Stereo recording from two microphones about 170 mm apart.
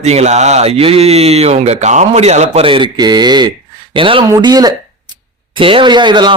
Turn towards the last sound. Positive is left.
turn(degrees=-25)  # may be behind; listen again after turning